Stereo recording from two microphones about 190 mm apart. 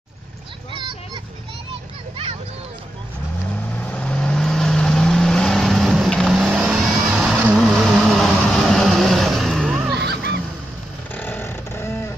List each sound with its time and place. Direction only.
0.7 s a sound: 25° right (ahead or behind)
3.7 s vehicle: 5° left (ahead or behind)
9.9 s goose: 60° right (ahead or behind)
11.1 s vehicle: 10° left (ahead or behind)